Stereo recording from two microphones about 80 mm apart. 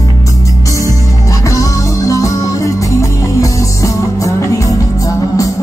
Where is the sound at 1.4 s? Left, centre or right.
Left.